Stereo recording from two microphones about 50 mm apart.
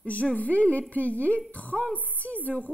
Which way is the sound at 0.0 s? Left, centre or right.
Left.